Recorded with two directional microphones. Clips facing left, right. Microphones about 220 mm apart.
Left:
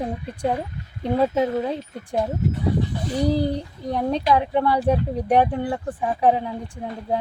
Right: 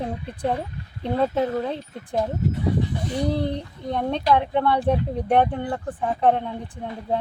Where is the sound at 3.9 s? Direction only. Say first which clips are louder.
Left 1 dB; 5° left (ahead or behind).